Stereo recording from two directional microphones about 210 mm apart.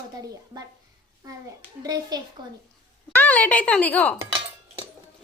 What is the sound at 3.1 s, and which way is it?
Speech, 5° left (ahead or behind).